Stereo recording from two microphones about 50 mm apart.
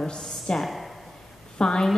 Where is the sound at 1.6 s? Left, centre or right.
Centre.